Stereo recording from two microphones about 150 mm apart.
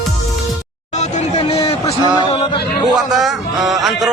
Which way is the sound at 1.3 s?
40° left (ahead or behind).